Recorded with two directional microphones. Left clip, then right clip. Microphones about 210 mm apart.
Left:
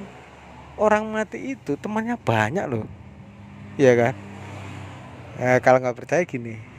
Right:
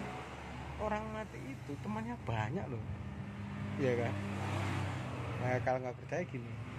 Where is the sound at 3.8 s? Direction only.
50° left (ahead or behind).